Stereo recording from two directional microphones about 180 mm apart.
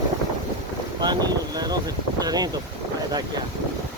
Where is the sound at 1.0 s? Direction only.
20° right (ahead or behind).